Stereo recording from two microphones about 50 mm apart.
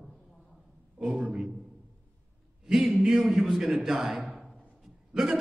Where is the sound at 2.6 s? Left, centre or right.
Centre.